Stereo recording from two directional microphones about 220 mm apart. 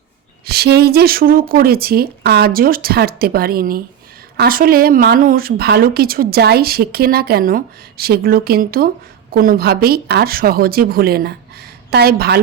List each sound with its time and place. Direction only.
0.4 s a woman's voice: 45° right (ahead or behind)